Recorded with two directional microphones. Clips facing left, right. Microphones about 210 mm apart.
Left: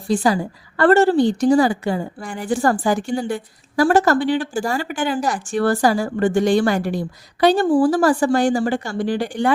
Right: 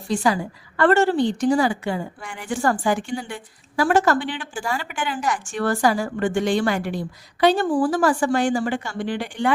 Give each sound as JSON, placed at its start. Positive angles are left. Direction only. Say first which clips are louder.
{"t": 0.1, "sound": "a woman's voice", "louder": "left 3 dB", "side_deg": 35}